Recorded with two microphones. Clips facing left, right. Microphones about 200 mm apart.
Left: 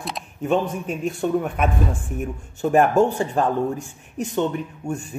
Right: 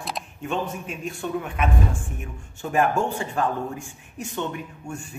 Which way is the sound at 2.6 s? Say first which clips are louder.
Left 6 dB; 40° left (ahead or behind).